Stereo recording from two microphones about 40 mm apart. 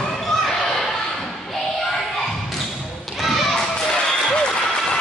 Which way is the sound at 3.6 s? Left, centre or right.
Left.